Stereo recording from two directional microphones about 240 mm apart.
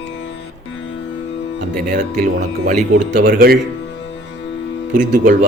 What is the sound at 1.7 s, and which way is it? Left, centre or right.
Speech, right.